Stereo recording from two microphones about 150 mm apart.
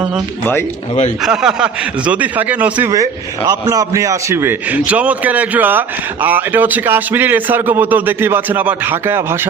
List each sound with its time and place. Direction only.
1.2 s a man's voice: 5° right (ahead or behind)
2.9 s a man's voice: 20° right (ahead or behind)